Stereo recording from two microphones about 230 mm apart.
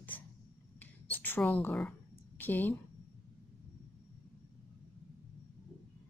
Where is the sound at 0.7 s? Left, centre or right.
Centre.